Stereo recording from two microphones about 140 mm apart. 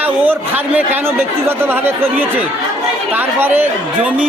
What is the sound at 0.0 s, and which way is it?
Speech, 10° right (ahead or behind).